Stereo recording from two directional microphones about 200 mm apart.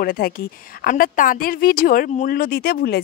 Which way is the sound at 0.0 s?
45° left (ahead or behind).